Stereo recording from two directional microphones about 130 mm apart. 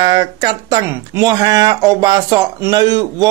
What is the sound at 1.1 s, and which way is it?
Speech, 30° right (ahead or behind).